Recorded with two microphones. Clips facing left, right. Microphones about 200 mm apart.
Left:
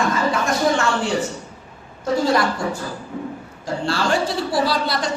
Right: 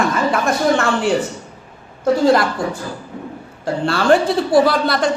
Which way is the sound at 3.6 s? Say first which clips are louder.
Right 4 dB; 60° right (ahead or behind).